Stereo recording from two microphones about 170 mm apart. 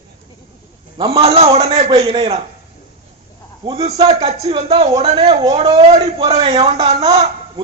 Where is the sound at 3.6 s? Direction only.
35° right (ahead or behind).